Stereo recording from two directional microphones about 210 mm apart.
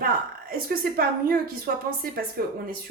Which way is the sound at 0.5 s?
45° right (ahead or behind).